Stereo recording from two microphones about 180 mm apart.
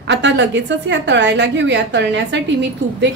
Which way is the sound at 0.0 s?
75° right (ahead or behind).